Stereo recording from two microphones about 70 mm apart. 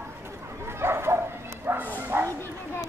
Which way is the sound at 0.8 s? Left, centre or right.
Right.